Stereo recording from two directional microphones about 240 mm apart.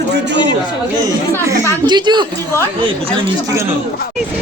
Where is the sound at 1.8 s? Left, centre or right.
Centre.